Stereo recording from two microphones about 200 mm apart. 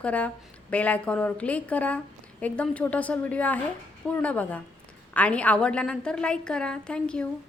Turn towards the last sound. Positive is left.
turn(degrees=5)  # may be behind; listen again after turning